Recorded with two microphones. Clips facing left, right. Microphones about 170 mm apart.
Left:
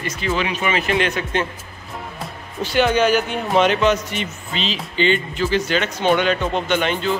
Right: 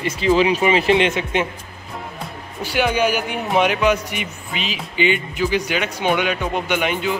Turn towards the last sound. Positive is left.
turn(degrees=-10)  # may be behind; listen again after turning